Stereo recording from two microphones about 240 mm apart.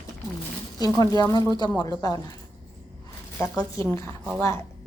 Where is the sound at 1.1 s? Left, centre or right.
Centre.